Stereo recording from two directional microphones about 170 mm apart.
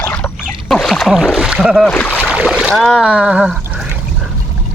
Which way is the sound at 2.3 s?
5° right (ahead or behind).